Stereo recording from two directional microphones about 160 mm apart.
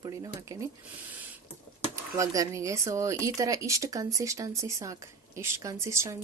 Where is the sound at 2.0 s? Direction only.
20° right (ahead or behind).